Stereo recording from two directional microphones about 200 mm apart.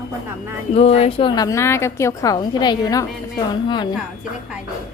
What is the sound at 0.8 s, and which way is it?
A woman's voice, 30° left (ahead or behind).